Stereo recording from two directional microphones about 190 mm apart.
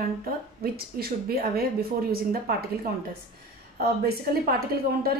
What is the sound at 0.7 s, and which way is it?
Speech, 55° right (ahead or behind).